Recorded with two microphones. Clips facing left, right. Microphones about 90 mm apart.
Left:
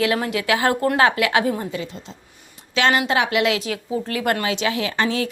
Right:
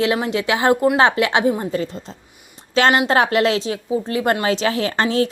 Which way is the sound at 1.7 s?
40° right (ahead or behind).